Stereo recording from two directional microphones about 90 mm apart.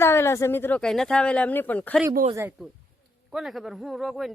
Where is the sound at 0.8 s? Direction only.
5° left (ahead or behind).